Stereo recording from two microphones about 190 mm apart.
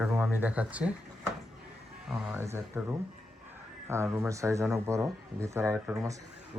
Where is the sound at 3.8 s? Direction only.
15° right (ahead or behind).